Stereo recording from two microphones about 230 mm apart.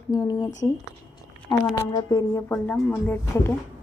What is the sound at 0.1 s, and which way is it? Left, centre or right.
A woman's voice, centre.